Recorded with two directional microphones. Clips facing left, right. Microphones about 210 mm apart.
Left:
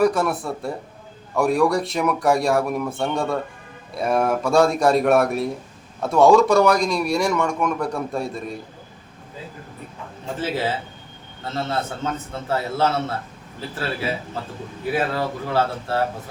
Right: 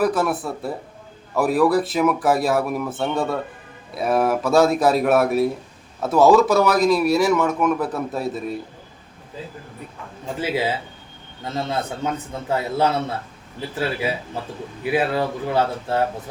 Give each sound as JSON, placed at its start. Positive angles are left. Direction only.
{"t": 0.0, "sound": "speech", "side_deg": 0}
{"t": 10.4, "sound": "a man's voice", "side_deg": -10}
{"t": 14.8, "sound": "a man's voice", "side_deg": -15}